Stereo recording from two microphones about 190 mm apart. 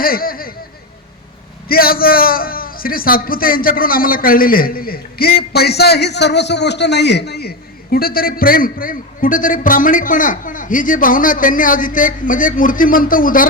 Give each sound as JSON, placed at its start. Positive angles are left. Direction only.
{"t": 0.0, "sound": "a man's voice", "side_deg": 50}
{"t": 1.6, "sound": "a man's voice", "side_deg": 50}